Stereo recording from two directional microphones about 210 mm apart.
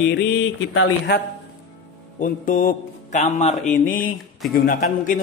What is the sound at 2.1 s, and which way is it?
Speech, 40° left (ahead or behind).